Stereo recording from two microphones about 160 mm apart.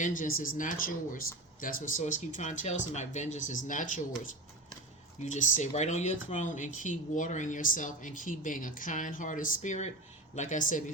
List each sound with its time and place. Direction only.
0.0 s speech: 55° left (ahead or behind)
5.2 s speech: 50° left (ahead or behind)